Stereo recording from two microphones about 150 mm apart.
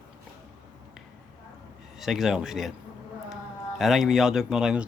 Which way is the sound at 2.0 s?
Centre (ahead or behind).